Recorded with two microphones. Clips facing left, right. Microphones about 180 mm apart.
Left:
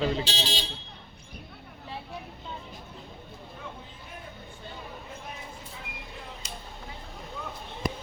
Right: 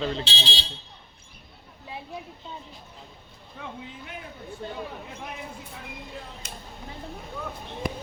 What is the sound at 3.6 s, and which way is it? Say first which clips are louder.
Vehicle: right 9 dB; 75° right (ahead or behind).